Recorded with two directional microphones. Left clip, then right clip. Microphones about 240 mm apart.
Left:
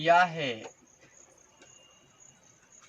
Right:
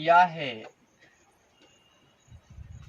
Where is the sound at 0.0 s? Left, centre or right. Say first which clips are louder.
Right 3 dB; centre.